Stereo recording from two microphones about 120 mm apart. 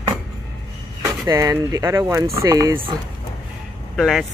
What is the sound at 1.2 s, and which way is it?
Speech, 30° right (ahead or behind).